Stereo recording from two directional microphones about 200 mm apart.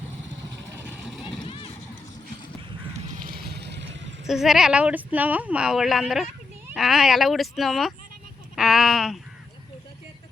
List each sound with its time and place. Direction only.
0.9 s vehicle: centre (ahead or behind)
1.5 s run: 25° left (ahead or behind)
3.1 s vehicle: 45° right (ahead or behind)
4.3 s speech: centre (ahead or behind)